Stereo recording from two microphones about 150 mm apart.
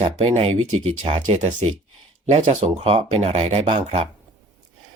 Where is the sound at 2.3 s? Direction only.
50° right (ahead or behind).